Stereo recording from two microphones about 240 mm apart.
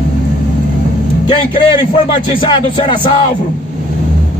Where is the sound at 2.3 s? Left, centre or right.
Centre.